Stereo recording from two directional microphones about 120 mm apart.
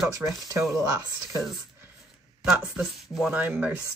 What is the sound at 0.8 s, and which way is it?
Speech, 25° right (ahead or behind).